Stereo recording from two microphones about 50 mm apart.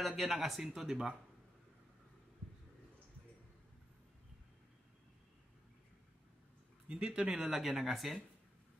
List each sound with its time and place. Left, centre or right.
0.0 s speech: centre
6.9 s speech: right
7.3 s speech: centre